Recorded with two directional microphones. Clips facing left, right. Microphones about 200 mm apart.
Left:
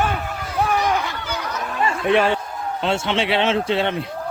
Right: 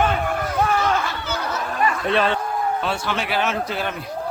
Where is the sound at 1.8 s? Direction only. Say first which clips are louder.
Left 3 dB; 25° left (ahead or behind).